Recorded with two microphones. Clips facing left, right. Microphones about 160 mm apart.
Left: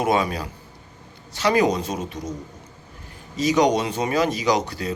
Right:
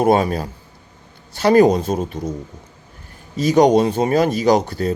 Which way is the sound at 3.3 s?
50° right (ahead or behind).